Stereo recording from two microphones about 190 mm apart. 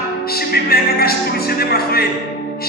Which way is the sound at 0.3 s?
55° left (ahead or behind).